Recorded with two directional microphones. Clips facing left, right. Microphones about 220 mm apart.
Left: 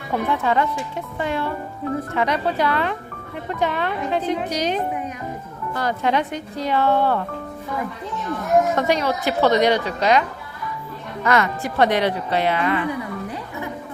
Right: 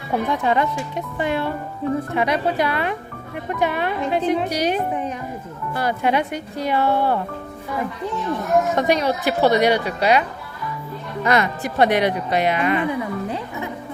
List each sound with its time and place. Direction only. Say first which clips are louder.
0.3 s speech: even; 15° right (ahead or behind)
8.7 s speech: right 1 dB; 15° right (ahead or behind)
11.3 s speech: even; 15° right (ahead or behind)